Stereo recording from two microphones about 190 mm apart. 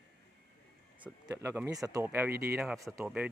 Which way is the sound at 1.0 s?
10° right (ahead or behind).